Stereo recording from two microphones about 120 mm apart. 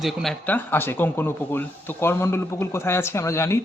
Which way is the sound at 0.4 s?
15° left (ahead or behind).